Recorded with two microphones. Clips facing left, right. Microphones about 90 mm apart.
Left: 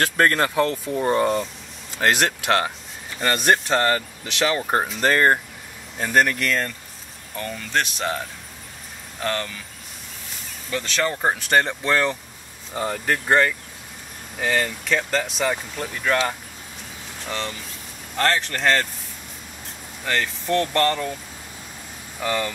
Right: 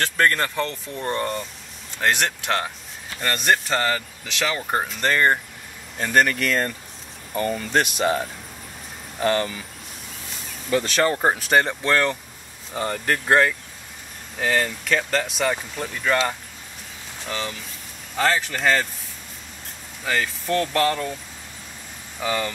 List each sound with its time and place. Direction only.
0.0 s speech: 5° left (ahead or behind)
10.7 s speech: 5° right (ahead or behind)
20.1 s speech: centre (ahead or behind)
22.2 s speech: centre (ahead or behind)